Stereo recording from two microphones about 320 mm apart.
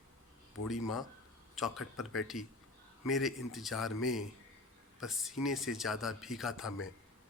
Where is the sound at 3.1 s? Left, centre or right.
Centre.